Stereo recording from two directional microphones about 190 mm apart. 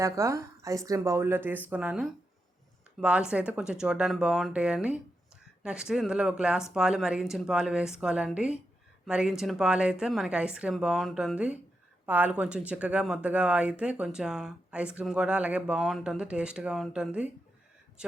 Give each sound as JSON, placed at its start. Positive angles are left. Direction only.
{"t": 0.0, "sound": "a woman's voice", "side_deg": -15}